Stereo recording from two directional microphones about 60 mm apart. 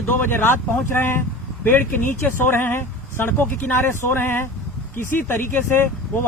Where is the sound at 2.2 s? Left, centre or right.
Left.